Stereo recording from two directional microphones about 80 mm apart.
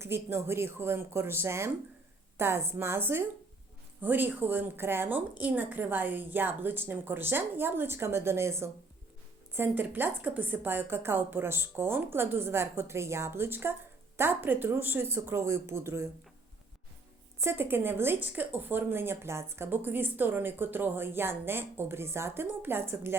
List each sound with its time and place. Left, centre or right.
0.0 s speech: right
17.4 s speech: right